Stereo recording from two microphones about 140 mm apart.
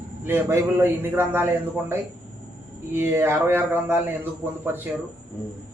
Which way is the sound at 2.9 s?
15° right (ahead or behind).